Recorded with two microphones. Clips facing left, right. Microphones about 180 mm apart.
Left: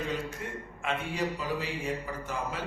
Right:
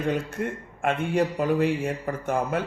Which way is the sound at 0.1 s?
55° right (ahead or behind).